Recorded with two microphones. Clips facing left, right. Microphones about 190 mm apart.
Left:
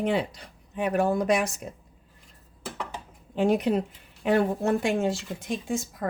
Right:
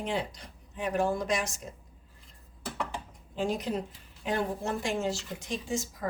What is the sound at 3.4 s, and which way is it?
Speech, 60° left (ahead or behind).